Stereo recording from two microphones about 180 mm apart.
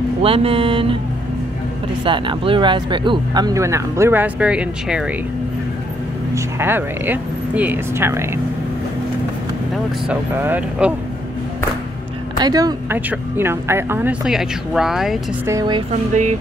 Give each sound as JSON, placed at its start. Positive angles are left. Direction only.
{"t": 0.2, "sound": "speech", "side_deg": -30}
{"t": 2.0, "sound": "speech", "side_deg": -25}
{"t": 6.3, "sound": "speech", "side_deg": -10}
{"t": 10.0, "sound": "speech", "side_deg": -10}
{"t": 12.4, "sound": "speech", "side_deg": -20}
{"t": 15.4, "sound": "speech", "side_deg": -20}
{"t": 15.9, "sound": "speech", "side_deg": -40}